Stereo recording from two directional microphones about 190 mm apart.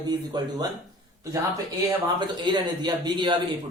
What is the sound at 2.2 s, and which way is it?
Speech, 25° right (ahead or behind).